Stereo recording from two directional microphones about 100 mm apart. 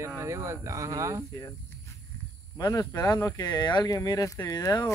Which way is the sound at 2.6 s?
40° left (ahead or behind).